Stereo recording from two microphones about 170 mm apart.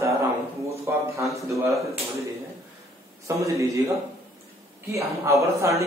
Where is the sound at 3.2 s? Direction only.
20° right (ahead or behind).